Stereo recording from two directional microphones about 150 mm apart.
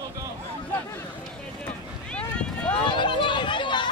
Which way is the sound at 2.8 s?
30° left (ahead or behind).